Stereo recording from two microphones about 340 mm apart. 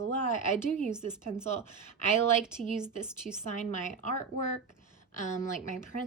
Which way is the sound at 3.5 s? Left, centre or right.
Left.